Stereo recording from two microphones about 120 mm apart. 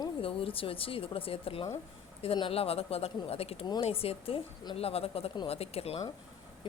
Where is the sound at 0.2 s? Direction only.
50° left (ahead or behind).